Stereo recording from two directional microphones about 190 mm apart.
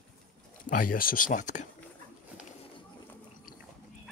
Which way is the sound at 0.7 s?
45° left (ahead or behind).